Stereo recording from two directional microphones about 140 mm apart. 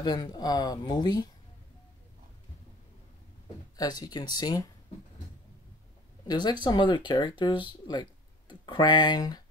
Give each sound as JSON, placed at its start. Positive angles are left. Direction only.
{"t": 0.0, "sound": "speech", "side_deg": 30}
{"t": 3.7, "sound": "speech", "side_deg": 30}
{"t": 6.2, "sound": "speech", "side_deg": 30}